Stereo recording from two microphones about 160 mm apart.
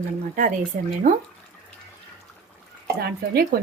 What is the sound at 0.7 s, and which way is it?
Speech, 65° right (ahead or behind).